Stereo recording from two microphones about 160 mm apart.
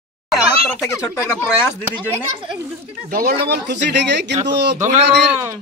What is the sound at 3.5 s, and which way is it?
Speech, 90° right.